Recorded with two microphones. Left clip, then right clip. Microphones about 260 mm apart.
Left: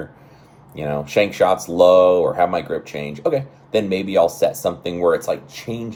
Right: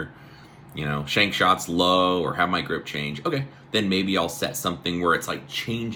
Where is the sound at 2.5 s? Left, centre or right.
Centre.